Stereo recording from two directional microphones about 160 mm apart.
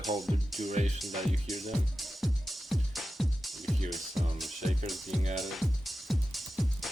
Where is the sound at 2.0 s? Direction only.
Centre (ahead or behind).